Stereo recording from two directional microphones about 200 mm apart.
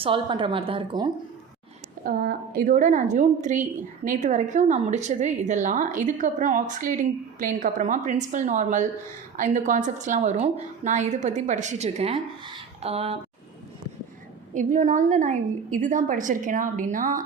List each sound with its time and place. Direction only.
0.0 s a woman's voice: 25° right (ahead or behind)
2.0 s a woman's voice: 50° right (ahead or behind); by 13.1 s 30° right (ahead or behind)
14.5 s a woman's voice: 40° right (ahead or behind)